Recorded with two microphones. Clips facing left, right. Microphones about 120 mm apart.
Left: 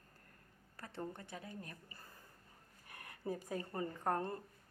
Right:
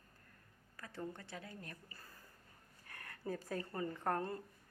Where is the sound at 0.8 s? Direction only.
30° left (ahead or behind).